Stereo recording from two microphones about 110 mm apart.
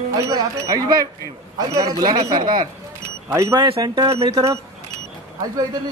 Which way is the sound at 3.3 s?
25° right (ahead or behind).